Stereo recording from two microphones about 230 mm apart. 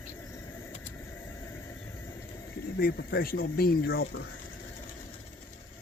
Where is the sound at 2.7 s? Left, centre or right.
Left.